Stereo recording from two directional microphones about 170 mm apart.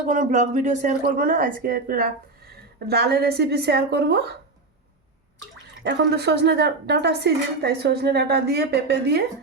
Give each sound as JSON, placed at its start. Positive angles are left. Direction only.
{"t": 0.1, "sound": "a woman's voice", "side_deg": -45}
{"t": 5.8, "sound": "a woman's voice", "side_deg": -90}